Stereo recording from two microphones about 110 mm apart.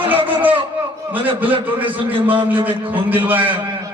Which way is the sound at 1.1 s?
55° right (ahead or behind).